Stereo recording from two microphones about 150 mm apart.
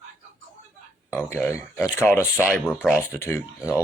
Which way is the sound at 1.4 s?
15° left (ahead or behind).